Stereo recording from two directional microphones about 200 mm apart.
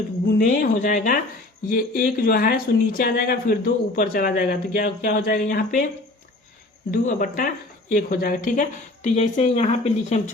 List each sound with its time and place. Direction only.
0.3 s speech: 45° left (ahead or behind)
6.9 s speech: 40° left (ahead or behind)